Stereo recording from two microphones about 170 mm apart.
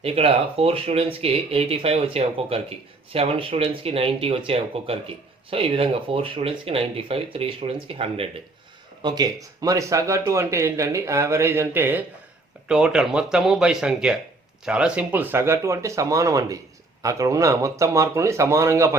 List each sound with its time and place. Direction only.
0.0 s speech: 35° right (ahead or behind); by 18.9 s 15° right (ahead or behind)